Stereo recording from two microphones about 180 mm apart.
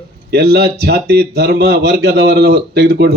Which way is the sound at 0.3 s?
65° right (ahead or behind).